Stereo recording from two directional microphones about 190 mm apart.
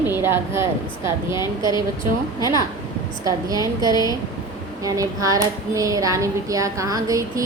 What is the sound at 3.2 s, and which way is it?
A woman's voice, 20° right (ahead or behind).